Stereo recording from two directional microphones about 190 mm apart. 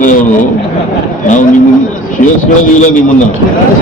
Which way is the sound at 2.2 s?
40° left (ahead or behind).